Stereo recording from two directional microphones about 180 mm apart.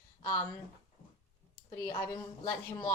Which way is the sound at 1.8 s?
15° left (ahead or behind).